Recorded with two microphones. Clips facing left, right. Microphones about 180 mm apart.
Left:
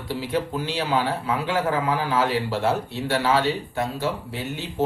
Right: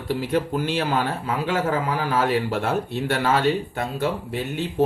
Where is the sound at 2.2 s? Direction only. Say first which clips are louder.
Right 1 dB; 55° right (ahead or behind).